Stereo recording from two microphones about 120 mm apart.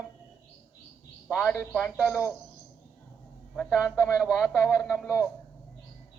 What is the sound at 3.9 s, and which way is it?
Speech, 5° right (ahead or behind).